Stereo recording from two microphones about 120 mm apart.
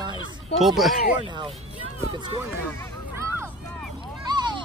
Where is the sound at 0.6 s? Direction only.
Centre (ahead or behind).